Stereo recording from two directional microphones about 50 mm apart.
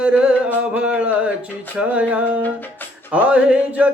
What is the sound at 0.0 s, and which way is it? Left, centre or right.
Music, right.